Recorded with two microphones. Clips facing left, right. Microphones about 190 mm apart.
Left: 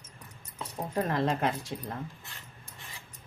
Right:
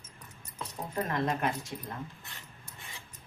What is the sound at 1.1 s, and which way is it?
Speech, 30° left (ahead or behind).